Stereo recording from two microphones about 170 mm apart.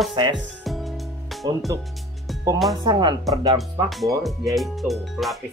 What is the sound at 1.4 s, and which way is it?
Speech, 25° right (ahead or behind).